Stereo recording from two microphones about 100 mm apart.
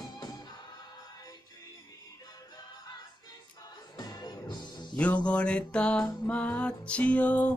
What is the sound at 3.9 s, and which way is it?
Music, 45° left (ahead or behind).